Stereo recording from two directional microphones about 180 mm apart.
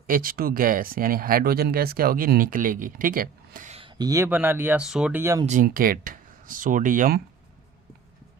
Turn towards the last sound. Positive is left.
turn(degrees=-45)  # may be behind; listen again after turning